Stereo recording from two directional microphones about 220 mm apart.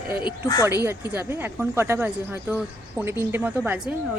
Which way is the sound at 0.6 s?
10° right (ahead or behind).